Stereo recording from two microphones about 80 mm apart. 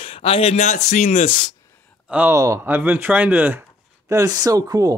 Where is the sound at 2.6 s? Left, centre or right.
Right.